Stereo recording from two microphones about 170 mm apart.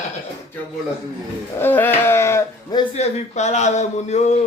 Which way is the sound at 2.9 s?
40° left (ahead or behind).